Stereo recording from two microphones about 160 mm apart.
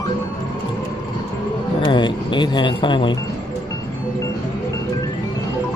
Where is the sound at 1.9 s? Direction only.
30° left (ahead or behind).